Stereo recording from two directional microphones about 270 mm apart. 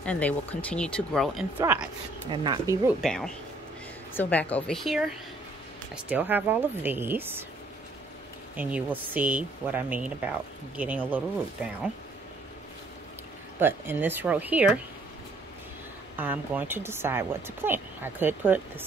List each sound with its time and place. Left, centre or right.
0.0 s speech: centre
3.0 s speech: centre
8.5 s speech: centre
13.6 s speech: centre
16.2 s speech: centre